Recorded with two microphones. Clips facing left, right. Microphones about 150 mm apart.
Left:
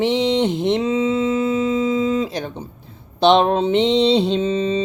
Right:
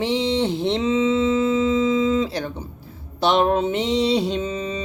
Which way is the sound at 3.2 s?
25° left (ahead or behind).